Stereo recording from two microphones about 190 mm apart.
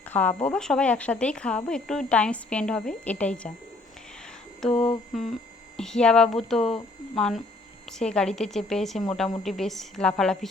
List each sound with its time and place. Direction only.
0.0 s a woman's voice: 10° left (ahead or behind)
4.7 s humming: 30° left (ahead or behind)
5.7 s a woman's voice: 5° left (ahead or behind)